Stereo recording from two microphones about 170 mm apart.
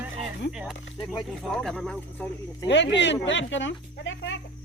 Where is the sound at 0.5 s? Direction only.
5° right (ahead or behind).